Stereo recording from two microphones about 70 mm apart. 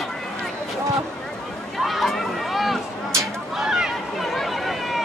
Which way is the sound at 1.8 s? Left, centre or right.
Centre.